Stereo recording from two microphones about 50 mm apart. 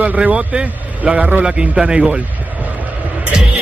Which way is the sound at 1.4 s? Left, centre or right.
Centre.